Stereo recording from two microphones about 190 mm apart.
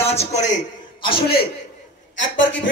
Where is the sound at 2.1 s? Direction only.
75° left (ahead or behind).